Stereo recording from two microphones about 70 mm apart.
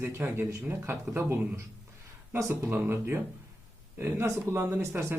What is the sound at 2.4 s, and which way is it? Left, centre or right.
Speech, right.